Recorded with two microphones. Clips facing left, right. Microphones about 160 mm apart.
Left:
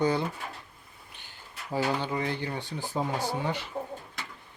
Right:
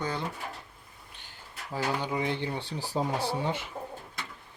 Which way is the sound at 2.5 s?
35° right (ahead or behind).